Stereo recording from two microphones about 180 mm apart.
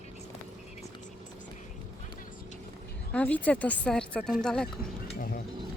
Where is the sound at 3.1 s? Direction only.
10° left (ahead or behind).